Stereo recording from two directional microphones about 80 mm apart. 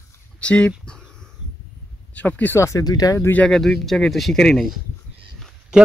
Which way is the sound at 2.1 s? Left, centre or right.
Centre.